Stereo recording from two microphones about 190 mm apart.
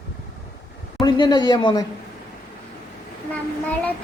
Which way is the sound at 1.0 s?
20° left (ahead or behind).